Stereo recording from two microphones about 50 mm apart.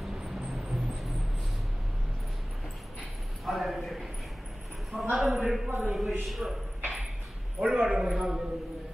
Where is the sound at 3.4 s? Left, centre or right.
Centre.